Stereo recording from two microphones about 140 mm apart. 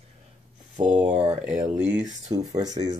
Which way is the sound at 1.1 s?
50° right (ahead or behind).